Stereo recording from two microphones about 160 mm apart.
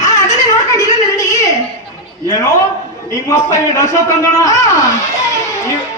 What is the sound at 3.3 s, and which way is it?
A woman's voice, 20° left (ahead or behind).